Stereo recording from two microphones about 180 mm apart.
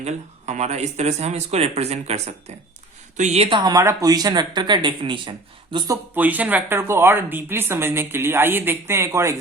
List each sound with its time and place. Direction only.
0.0 s speech: 40° right (ahead or behind)
6.1 s speech: 10° right (ahead or behind)